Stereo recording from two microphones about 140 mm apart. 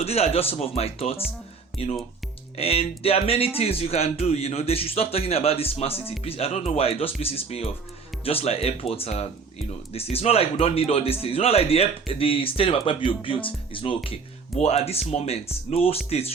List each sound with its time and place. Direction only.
0.0 s a man's voice: 45° left (ahead or behind)